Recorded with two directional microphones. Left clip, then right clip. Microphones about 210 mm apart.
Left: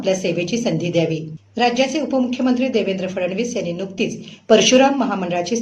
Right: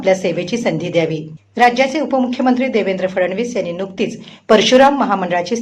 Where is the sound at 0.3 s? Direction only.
15° right (ahead or behind).